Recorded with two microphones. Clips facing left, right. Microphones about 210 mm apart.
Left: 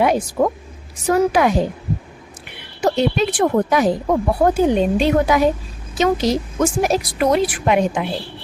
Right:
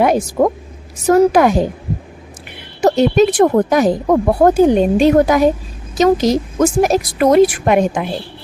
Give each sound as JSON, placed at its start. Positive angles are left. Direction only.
{"t": 0.0, "sound": "speech", "side_deg": -45}
{"t": 2.8, "sound": "speech", "side_deg": -45}